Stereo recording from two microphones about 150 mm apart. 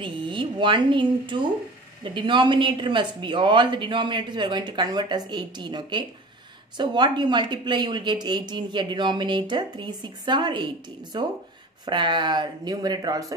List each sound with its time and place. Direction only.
0.0 s speech: 35° right (ahead or behind)